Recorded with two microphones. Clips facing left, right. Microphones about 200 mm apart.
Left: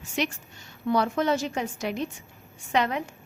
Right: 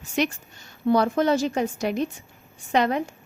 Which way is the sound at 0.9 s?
40° right (ahead or behind).